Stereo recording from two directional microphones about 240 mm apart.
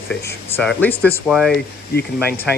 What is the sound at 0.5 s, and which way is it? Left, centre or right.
Speech, centre.